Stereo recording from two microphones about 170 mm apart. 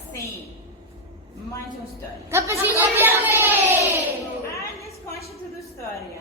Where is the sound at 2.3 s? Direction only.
15° right (ahead or behind).